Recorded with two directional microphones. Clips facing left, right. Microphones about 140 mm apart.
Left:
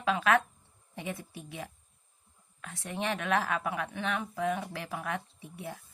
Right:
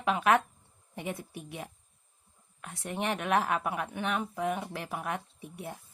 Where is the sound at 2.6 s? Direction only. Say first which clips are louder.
Right 1 dB; 20° right (ahead or behind).